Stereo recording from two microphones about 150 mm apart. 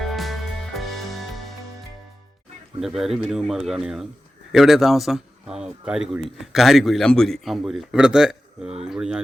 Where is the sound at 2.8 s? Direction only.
Centre (ahead or behind).